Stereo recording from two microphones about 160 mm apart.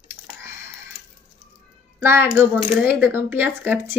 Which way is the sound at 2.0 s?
15° right (ahead or behind).